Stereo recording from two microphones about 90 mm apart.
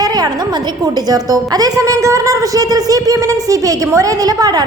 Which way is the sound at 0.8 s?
45° right (ahead or behind).